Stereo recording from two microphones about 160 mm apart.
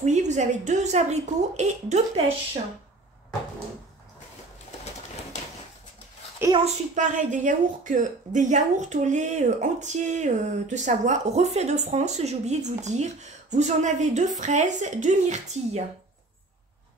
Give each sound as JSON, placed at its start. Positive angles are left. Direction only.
{"t": 0.0, "sound": "a woman's voice", "side_deg": -50}
{"t": 6.4, "sound": "a woman's voice", "side_deg": -15}
{"t": 7.0, "sound": "a woman's voice", "side_deg": -50}